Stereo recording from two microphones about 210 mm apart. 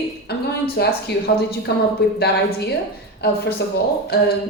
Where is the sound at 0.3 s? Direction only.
50° left (ahead or behind).